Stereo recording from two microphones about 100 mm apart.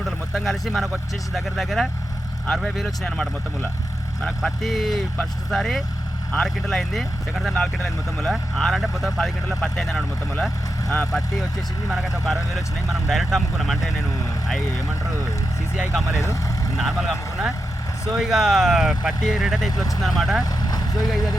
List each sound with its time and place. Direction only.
0.0 s vehicle: centre (ahead or behind)
1.3 s speech: centre (ahead or behind)
16.1 s speech: 30° left (ahead or behind)
16.7 s speech: 5° right (ahead or behind)
20.4 s vehicle: 40° left (ahead or behind)